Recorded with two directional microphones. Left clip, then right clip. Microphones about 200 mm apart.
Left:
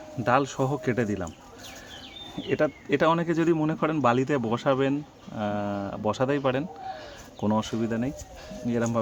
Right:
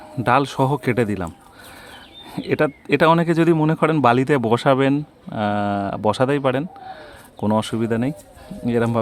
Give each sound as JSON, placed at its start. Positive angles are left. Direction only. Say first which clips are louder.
{"t": 0.3, "sound": "a man's voice", "louder": "right 6 dB", "side_deg": -40}
{"t": 2.3, "sound": "a man's voice", "louder": "right 6 dB", "side_deg": -45}